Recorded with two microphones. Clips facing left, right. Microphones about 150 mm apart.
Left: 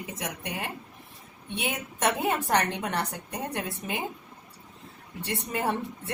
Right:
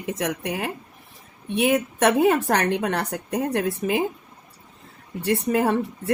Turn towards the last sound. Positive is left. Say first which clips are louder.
# right 9 dB
turn(degrees=-75)  # may be behind; listen again after turning